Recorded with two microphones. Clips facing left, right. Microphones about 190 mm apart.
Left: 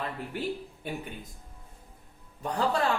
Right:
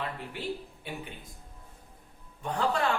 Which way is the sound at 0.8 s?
45° left (ahead or behind).